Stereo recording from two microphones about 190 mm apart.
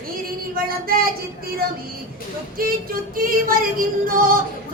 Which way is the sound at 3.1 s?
50° right (ahead or behind).